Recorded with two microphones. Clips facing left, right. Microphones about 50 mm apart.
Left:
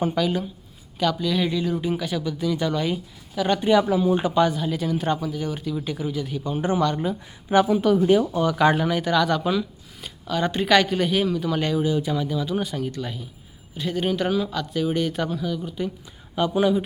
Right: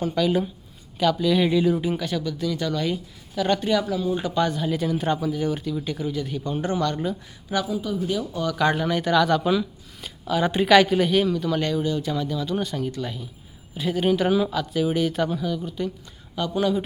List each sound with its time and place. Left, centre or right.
0.1 s speech: centre
3.7 s speech: left
4.4 s speech: centre
6.6 s speech: centre
7.5 s speech: left
7.8 s speech: left
8.0 s speech: left
8.3 s speech: centre
16.3 s speech: centre